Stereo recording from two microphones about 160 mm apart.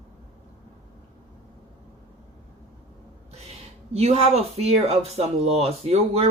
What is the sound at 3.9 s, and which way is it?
Speech, 40° right (ahead or behind).